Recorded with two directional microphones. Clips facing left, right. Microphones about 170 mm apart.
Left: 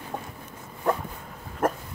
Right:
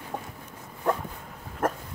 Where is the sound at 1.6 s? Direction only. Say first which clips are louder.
Left 2 dB; 10° left (ahead or behind).